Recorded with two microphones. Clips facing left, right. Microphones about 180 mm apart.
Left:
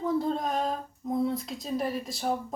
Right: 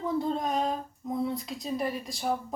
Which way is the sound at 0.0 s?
Centre (ahead or behind).